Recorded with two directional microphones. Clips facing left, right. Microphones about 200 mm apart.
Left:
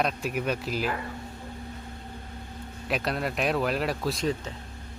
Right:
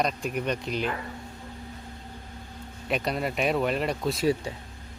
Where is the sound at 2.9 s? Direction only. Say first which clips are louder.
Right 1 dB; centre (ahead or behind).